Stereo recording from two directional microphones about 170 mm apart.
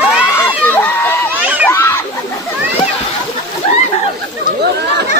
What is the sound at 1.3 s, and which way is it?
Crowd, 10° right (ahead or behind).